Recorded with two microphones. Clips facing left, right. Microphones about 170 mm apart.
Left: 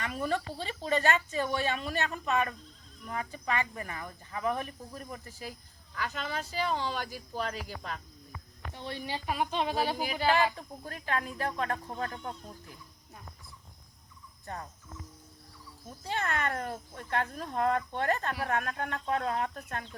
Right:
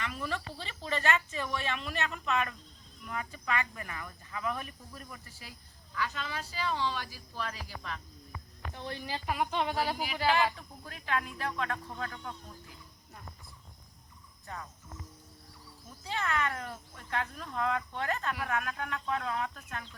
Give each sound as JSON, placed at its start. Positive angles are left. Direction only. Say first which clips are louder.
{"t": 0.0, "sound": "speech", "louder": "left 5 dB", "side_deg": 45}
{"t": 8.7, "sound": "speech", "louder": "left 1 dB", "side_deg": 25}
{"t": 10.8, "sound": "speech", "louder": "left 1 dB", "side_deg": 40}
{"t": 14.4, "sound": "cricket", "louder": "left 3 dB", "side_deg": 40}
{"t": 16.0, "sound": "speech", "louder": "left 1 dB", "side_deg": 45}
{"t": 18.3, "sound": "speech", "louder": "left 2 dB", "side_deg": 35}